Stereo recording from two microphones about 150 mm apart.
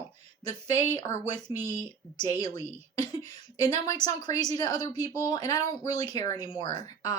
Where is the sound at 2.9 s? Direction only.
25° left (ahead or behind).